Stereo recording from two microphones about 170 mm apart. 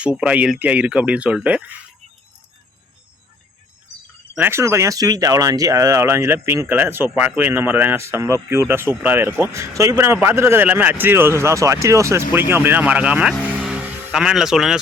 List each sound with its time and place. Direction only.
0.0 s a man's voice: 5° right (ahead or behind)
4.4 s a man's voice: 15° right (ahead or behind)
13.6 s music: 5° right (ahead or behind)